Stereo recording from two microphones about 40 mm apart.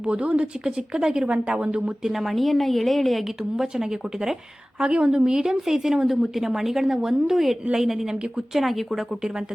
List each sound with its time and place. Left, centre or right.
0.1 s speech: right
0.9 s a woman's voice: centre
1.2 s a woman's voice: right
2.0 s a woman's voice: centre
3.8 s a woman's voice: centre
4.8 s a woman's voice: right; by 8.8 s centre